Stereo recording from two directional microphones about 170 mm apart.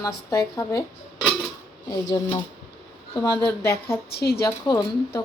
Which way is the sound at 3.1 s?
25° left (ahead or behind).